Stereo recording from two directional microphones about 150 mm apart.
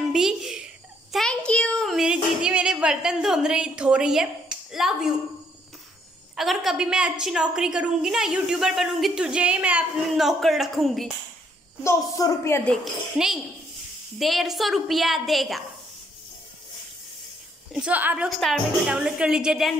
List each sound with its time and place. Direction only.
0.1 s a sound: 5° right (ahead or behind)
1.1 s child singing: 5° left (ahead or behind)
2.4 s a woman's voice: 5° right (ahead or behind)
6.3 s a woman's voice: centre (ahead or behind)
11.8 s a woman's voice: 20° left (ahead or behind)
12.7 s a woman's voice: centre (ahead or behind)
17.7 s a woman's voice: 10° right (ahead or behind)